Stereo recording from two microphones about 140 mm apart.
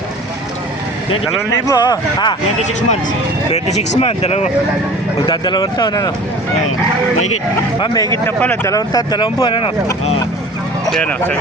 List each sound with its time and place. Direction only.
1.6 s speech: 25° left (ahead or behind)
3.5 s speech: 55° left (ahead or behind)
5.2 s speech: 30° left (ahead or behind)
7.8 s speech: 25° left (ahead or behind)
8.4 s speech: 10° left (ahead or behind)
8.7 s speech: 25° left (ahead or behind)
10.8 s speech: 5° left (ahead or behind)